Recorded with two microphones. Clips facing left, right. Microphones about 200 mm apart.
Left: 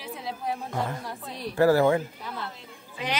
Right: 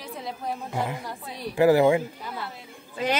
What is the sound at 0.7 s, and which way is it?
Speech, 10° right (ahead or behind).